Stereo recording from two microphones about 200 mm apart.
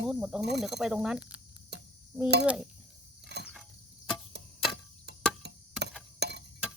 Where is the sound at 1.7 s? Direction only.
55° right (ahead or behind).